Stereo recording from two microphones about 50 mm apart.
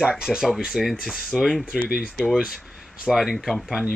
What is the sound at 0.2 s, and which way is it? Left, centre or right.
Speech, centre.